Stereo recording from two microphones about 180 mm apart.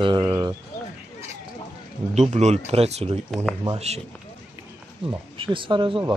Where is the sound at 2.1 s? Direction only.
40° right (ahead or behind).